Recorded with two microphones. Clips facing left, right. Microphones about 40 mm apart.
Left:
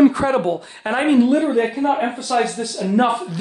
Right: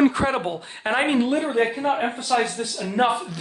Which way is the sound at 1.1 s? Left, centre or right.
Right.